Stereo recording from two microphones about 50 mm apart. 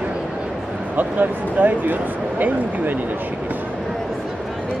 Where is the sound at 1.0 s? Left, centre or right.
Right.